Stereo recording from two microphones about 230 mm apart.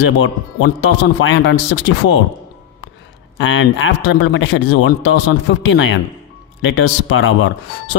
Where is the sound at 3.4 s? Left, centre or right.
Left.